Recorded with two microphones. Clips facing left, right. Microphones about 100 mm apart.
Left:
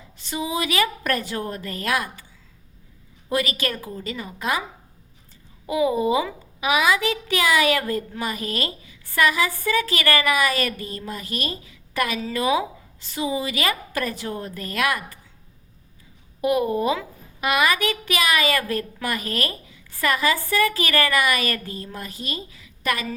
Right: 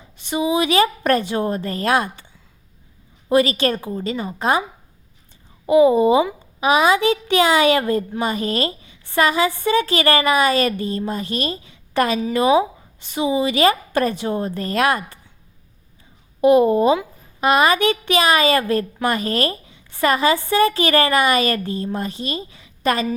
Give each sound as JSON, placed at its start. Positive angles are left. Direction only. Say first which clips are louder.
{"t": 0.2, "sound": "a child's voice", "louder": "right 7 dB", "side_deg": -20}
{"t": 3.2, "sound": "a child's voice", "louder": "right 8 dB", "side_deg": -30}
{"t": 5.6, "sound": "a child's voice", "louder": "right 8 dB", "side_deg": -25}
{"t": 16.4, "sound": "a child's voice", "louder": "right 8 dB", "side_deg": -25}